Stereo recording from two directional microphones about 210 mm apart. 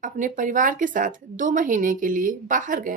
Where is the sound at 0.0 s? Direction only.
40° right (ahead or behind).